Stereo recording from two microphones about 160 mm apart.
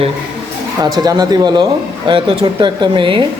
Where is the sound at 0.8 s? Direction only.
25° right (ahead or behind).